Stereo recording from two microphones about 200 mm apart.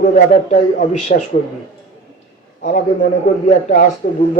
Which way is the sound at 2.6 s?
40° left (ahead or behind).